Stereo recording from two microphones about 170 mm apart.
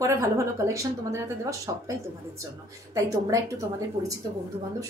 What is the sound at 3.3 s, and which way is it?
Speech, 20° right (ahead or behind).